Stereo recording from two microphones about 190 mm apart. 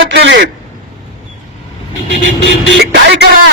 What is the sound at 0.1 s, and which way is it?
Speech, 60° right (ahead or behind).